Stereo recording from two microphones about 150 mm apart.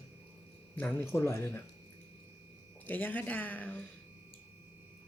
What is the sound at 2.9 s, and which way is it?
Speech, 10° left (ahead or behind).